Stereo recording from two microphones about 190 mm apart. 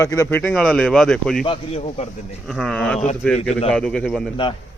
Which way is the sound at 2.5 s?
Centre (ahead or behind).